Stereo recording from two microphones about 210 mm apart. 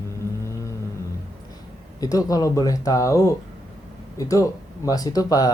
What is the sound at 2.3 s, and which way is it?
Speech, 15° left (ahead or behind).